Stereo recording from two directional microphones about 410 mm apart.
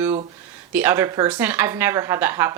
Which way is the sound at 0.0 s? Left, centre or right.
Centre.